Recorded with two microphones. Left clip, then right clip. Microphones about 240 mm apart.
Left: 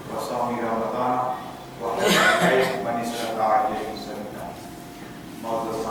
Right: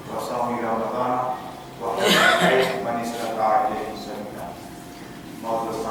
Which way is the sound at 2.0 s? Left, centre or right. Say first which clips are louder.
Right 1 dB; centre.